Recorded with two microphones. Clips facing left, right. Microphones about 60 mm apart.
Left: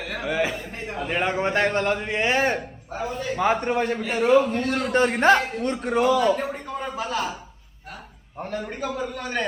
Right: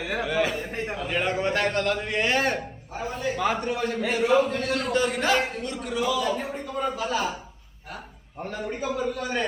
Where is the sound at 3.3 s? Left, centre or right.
Left.